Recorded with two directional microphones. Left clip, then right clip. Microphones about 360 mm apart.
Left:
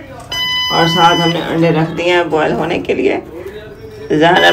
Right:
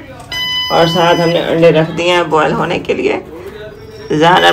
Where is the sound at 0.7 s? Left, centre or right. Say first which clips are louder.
Right 1 dB; centre.